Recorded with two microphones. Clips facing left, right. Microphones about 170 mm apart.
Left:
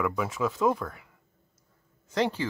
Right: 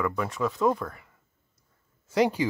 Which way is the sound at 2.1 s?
10° right (ahead or behind).